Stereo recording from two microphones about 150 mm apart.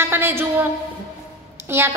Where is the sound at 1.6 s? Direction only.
15° right (ahead or behind).